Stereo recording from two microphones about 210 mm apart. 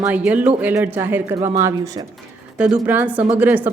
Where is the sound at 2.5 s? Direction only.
5° right (ahead or behind).